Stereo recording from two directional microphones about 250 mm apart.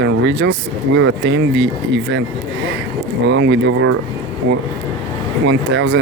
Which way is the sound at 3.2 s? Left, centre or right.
Right.